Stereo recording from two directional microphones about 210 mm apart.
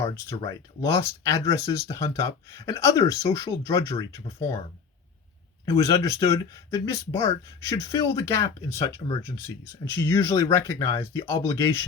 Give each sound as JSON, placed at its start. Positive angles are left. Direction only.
{"t": 0.0, "sound": "speech", "side_deg": 15}
{"t": 5.7, "sound": "speech", "side_deg": 15}